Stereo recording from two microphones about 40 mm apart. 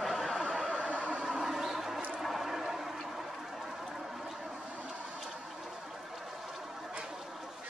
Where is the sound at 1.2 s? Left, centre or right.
Centre.